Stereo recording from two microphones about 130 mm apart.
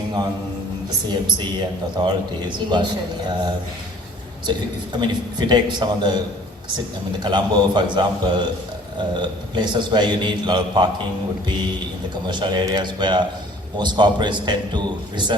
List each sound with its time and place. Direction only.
1.0 s a man's voice: 35° right (ahead or behind)
12.3 s a man's voice: 35° right (ahead or behind)